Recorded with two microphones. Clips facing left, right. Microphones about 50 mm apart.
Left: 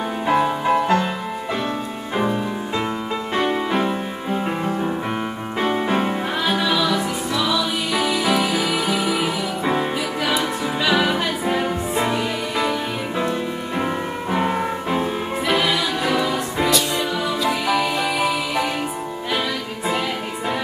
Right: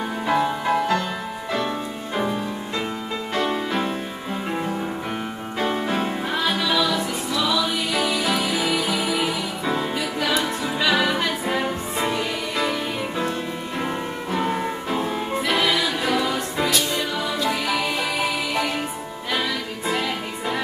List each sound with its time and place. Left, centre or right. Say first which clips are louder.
0.3 s music: left 3 dB; centre
3.3 s music: left 3 dB; centre
5.6 s music: left 3 dB; centre
6.3 s music: even; centre
13.7 s music: left 3 dB; centre
15.4 s music: left 2 dB; centre